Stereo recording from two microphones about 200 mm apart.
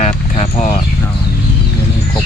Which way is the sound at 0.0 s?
35° left (ahead or behind).